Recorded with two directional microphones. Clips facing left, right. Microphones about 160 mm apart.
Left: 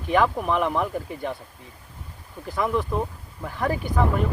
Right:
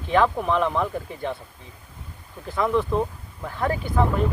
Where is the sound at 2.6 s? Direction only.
10° left (ahead or behind).